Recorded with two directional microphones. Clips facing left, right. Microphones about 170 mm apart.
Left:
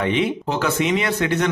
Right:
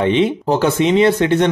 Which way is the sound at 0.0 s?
30° right (ahead or behind).